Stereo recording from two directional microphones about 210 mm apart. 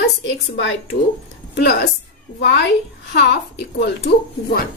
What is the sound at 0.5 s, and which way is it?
Speech, 60° left (ahead or behind).